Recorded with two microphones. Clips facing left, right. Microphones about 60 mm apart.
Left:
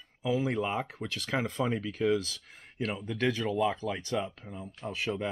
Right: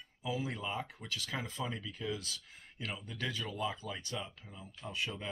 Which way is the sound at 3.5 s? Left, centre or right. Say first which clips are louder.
Left 9 dB; left.